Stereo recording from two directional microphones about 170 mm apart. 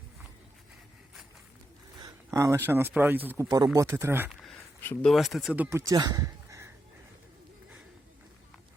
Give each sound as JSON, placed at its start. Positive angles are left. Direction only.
{"t": 2.0, "sound": "speech", "side_deg": -20}
{"t": 4.8, "sound": "speech", "side_deg": 10}
{"t": 5.1, "sound": "speech", "side_deg": 0}
{"t": 5.5, "sound": "speech", "side_deg": -10}